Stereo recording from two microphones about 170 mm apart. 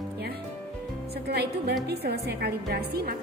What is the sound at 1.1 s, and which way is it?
A woman's voice, 70° right (ahead or behind).